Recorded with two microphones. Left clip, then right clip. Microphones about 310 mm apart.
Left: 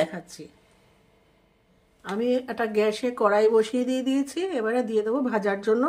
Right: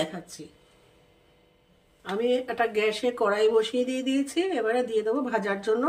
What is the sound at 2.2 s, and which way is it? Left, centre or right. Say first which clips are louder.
Speech: right 1 dB; centre.